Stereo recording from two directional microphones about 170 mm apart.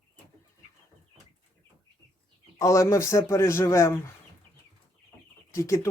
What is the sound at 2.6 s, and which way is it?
Speech, 20° left (ahead or behind).